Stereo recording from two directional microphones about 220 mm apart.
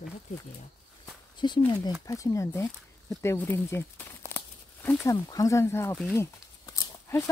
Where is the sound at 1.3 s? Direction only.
20° left (ahead or behind).